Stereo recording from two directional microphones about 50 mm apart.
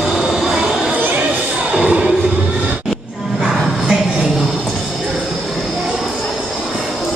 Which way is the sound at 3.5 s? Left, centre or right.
Centre.